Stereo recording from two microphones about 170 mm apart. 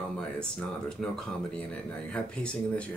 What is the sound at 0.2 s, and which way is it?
Speech, 5° left (ahead or behind).